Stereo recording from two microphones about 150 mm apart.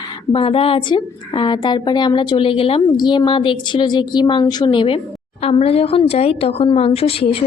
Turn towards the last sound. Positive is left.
turn(degrees=40)  # may be behind; listen again after turning